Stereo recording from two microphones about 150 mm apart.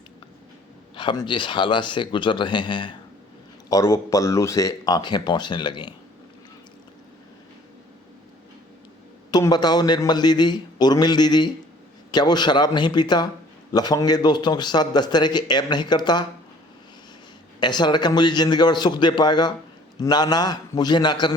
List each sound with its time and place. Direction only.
0.9 s a man's voice: 30° left (ahead or behind)
9.3 s a man's voice: 25° left (ahead or behind)
17.6 s a man's voice: 30° left (ahead or behind)